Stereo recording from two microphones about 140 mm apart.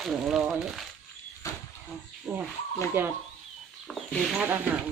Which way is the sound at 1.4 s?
20° left (ahead or behind).